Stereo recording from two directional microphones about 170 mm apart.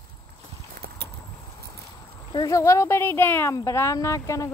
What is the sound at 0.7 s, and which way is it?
Clip-clop, 65° right (ahead or behind).